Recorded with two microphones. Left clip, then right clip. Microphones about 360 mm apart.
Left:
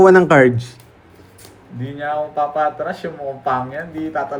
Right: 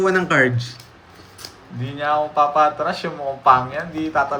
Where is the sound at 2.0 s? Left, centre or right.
Right.